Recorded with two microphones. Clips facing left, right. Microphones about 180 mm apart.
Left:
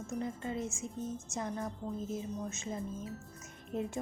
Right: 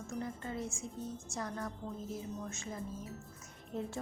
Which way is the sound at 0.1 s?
20° left (ahead or behind).